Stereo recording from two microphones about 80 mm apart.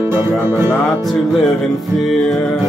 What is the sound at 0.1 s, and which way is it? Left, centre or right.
Music, right.